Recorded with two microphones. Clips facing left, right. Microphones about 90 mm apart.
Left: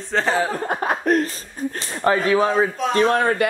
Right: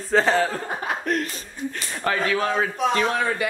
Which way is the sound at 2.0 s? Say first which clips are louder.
Left 6 dB; 30° left (ahead or behind).